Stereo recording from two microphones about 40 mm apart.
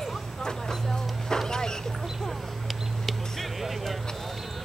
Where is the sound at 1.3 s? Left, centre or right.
Centre.